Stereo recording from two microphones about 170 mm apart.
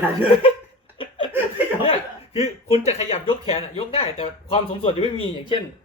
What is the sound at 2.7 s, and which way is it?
Speech, 35° left (ahead or behind).